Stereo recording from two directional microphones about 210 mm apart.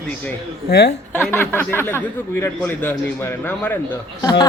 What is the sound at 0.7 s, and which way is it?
Speech, 50° left (ahead or behind).